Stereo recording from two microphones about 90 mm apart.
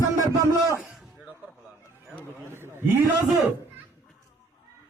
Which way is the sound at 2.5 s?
25° right (ahead or behind).